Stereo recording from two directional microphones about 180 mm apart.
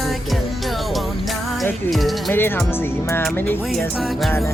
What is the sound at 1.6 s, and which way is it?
Speech, centre (ahead or behind).